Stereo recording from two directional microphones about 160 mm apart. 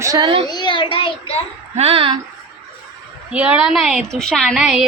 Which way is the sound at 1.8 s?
40° right (ahead or behind).